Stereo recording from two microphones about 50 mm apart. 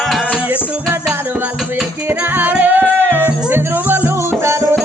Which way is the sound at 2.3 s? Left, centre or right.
Right.